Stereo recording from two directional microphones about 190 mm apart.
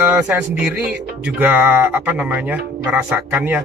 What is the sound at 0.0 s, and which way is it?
Speech, 10° right (ahead or behind).